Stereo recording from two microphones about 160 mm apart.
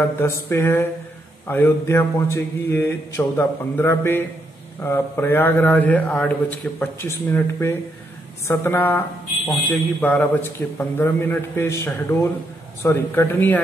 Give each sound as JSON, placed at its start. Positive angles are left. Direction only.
{"t": 0.2, "sound": "speech", "side_deg": 15}